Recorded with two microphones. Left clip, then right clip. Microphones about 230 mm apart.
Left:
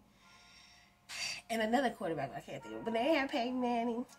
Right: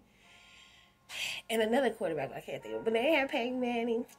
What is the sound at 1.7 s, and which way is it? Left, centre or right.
Speech, left.